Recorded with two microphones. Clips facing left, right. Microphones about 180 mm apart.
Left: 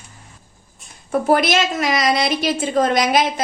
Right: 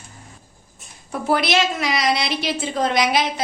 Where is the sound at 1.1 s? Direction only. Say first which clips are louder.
Left 4 dB; 45° left (ahead or behind).